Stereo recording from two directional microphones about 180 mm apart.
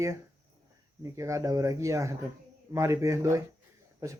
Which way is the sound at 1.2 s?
15° right (ahead or behind).